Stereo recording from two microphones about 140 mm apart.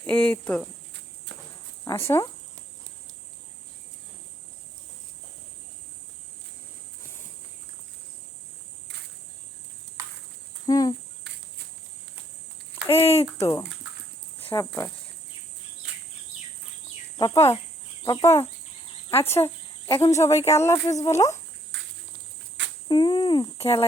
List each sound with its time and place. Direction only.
0.0 s speech: 10° left (ahead or behind)
1.8 s speech: 20° left (ahead or behind)
10.7 s speech: 25° left (ahead or behind)
13.3 s speech: 20° left (ahead or behind)
17.2 s speech: 25° left (ahead or behind)
22.9 s speech: 35° left (ahead or behind)